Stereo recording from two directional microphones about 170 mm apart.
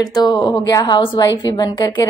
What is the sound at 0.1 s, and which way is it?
A woman's voice, 25° left (ahead or behind).